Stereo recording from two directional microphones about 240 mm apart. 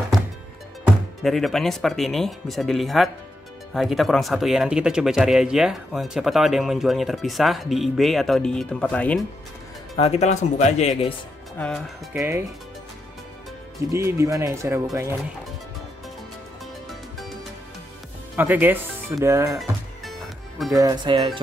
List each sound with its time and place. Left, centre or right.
1.2 s speech: centre
9.9 s speech: left
11.5 s speech: centre
12.1 s speech: centre
13.9 s speech: centre
18.3 s speech: centre
19.6 s music: centre
20.7 s speech: centre